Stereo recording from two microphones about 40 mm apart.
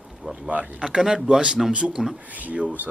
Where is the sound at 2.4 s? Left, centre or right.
Right.